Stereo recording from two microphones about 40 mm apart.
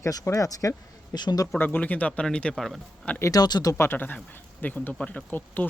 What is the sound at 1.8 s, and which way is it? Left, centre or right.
Speech, left.